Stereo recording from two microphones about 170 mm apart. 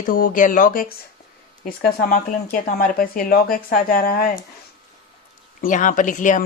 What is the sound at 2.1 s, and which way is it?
Speech, 60° left (ahead or behind).